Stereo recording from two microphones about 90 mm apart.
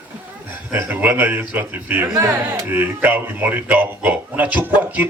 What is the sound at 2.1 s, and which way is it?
Speech, 40° right (ahead or behind).